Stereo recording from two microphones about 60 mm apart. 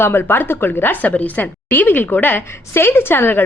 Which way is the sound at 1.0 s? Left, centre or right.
Left.